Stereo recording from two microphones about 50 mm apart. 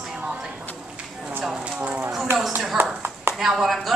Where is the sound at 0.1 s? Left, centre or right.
Centre.